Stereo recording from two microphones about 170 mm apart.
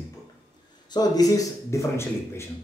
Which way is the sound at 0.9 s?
20° left (ahead or behind).